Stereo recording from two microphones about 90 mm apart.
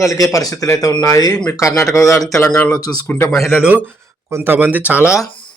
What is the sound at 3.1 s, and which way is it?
Speech, 25° left (ahead or behind).